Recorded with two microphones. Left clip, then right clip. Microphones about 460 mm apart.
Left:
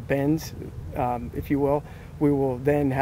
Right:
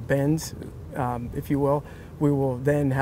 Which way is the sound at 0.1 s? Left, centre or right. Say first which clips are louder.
Even; right.